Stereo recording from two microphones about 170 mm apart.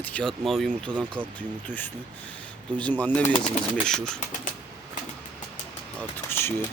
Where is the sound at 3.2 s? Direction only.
40° left (ahead or behind).